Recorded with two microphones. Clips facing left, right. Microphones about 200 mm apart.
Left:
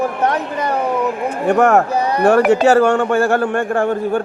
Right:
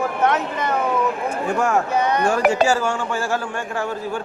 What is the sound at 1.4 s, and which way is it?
A man's voice, 65° left (ahead or behind).